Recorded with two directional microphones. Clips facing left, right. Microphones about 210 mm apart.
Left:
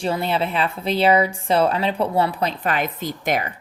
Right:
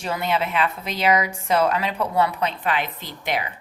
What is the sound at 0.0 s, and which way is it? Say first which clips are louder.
A woman's voice: left 2 dB; 30° left (ahead or behind).